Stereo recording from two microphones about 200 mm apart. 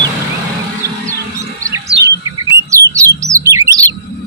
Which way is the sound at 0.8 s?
15° right (ahead or behind).